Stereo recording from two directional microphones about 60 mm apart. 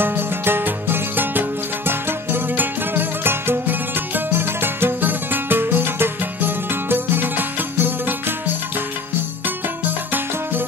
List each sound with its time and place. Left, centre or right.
0.0 s music: right
9.8 s music: right